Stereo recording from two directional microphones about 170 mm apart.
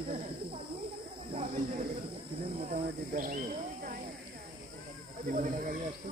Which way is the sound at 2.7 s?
50° right (ahead or behind).